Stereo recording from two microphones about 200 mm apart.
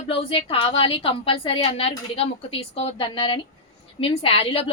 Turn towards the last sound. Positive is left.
turn(degrees=30)  # may be behind; listen again after turning